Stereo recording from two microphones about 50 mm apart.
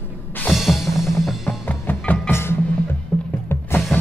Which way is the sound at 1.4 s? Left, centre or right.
Left.